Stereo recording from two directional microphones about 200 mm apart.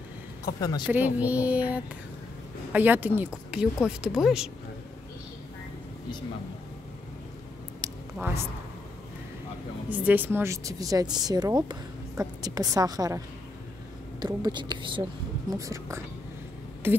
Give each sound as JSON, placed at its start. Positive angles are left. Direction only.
{"t": 0.6, "sound": "speech", "side_deg": 20}
{"t": 0.8, "sound": "speech", "side_deg": -10}
{"t": 7.8, "sound": "a sound", "side_deg": -20}
{"t": 9.8, "sound": "speech", "side_deg": -10}
{"t": 14.2, "sound": "a woman's voice", "side_deg": -20}